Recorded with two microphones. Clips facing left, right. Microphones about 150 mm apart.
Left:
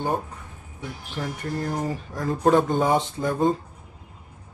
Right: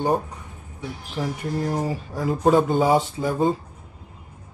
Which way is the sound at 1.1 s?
5° right (ahead or behind).